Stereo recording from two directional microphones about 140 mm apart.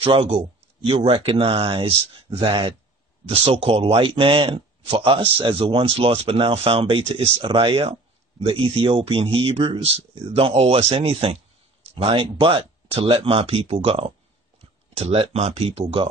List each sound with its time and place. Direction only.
0.0 s speech: 40° right (ahead or behind)